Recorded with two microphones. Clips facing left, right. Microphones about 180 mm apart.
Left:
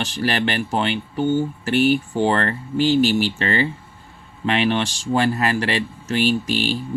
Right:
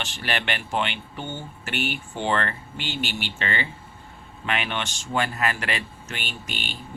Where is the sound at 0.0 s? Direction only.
40° left (ahead or behind).